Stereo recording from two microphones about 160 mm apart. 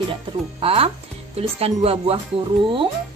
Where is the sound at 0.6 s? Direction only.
35° right (ahead or behind).